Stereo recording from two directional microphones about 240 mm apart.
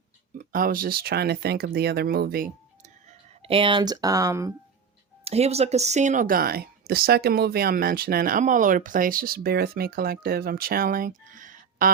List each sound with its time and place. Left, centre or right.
0.3 s speech: right
3.4 s speech: right
5.2 s speech: right